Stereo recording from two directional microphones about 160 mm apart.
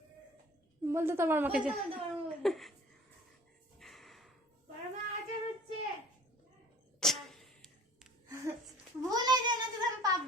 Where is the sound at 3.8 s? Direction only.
Centre (ahead or behind).